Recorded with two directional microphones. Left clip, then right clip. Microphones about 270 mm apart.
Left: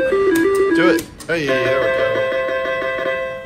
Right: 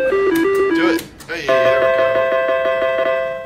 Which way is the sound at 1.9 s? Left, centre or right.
Right.